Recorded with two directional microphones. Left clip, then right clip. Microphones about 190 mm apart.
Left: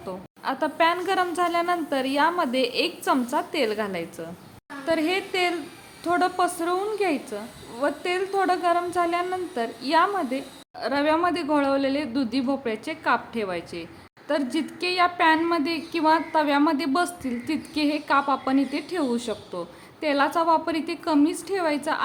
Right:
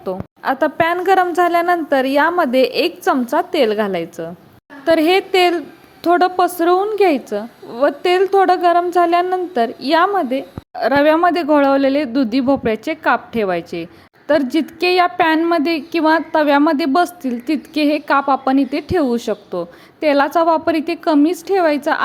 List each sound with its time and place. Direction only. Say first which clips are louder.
0.0 s a woman's voice: right 9 dB; 30° right (ahead or behind)